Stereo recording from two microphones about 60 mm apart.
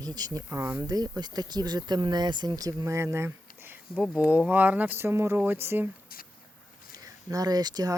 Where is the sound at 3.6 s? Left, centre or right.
Right.